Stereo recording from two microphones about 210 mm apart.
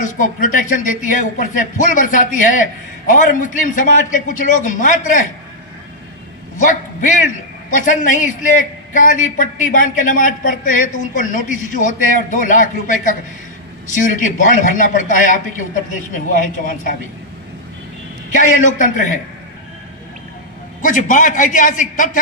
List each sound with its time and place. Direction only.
0.0 s a man's voice: 40° left (ahead or behind)
6.5 s a man's voice: 40° left (ahead or behind)
14.1 s a man's voice: 40° left (ahead or behind)
18.3 s a man's voice: 40° left (ahead or behind)
20.8 s a man's voice: 40° left (ahead or behind)